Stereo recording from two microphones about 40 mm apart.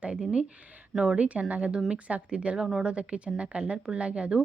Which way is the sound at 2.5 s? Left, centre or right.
Centre.